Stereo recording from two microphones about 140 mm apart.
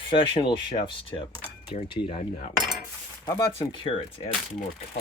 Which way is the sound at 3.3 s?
30° left (ahead or behind).